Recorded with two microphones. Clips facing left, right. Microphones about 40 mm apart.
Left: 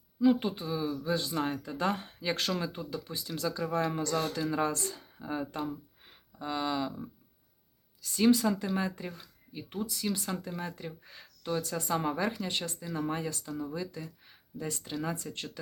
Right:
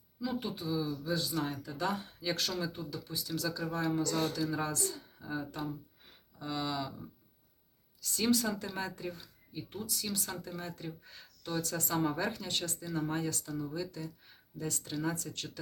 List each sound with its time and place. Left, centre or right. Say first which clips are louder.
0.2 s speech: left 10 dB; left
6.1 s speech: left 4 dB; left
8.3 s speech: left 5 dB; left